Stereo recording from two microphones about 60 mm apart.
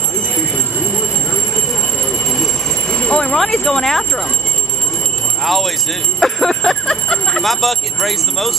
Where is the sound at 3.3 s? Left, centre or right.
Centre.